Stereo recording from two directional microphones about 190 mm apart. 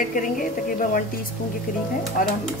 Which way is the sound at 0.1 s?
45° left (ahead or behind).